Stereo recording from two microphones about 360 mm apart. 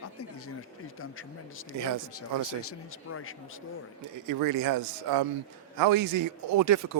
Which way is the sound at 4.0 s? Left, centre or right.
Right.